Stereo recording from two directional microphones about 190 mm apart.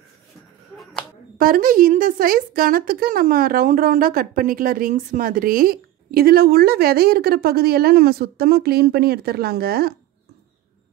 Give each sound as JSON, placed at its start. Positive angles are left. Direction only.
{"t": 1.4, "sound": "a woman's voice", "side_deg": -50}